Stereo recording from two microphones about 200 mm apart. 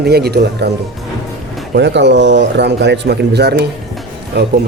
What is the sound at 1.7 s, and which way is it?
A man's voice, 60° right (ahead or behind).